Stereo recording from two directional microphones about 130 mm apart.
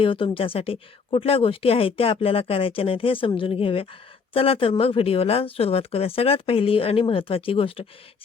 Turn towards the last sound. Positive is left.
turn(degrees=45)  # may be behind; listen again after turning